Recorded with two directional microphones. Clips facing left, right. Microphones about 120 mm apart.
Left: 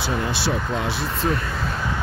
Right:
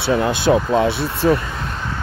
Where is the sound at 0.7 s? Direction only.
65° right (ahead or behind).